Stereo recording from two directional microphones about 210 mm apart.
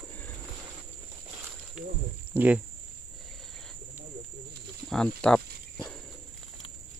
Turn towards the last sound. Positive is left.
turn(degrees=5)  # may be behind; listen again after turning